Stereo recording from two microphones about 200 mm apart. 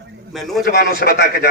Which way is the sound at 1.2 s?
50° left (ahead or behind).